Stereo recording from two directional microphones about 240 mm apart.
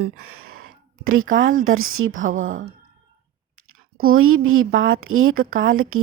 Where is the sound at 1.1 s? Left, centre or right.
Right.